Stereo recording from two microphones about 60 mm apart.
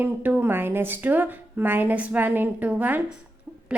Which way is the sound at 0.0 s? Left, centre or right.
Right.